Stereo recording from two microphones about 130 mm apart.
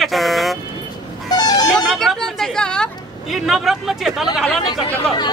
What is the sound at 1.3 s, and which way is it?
Vehicle, 30° left (ahead or behind).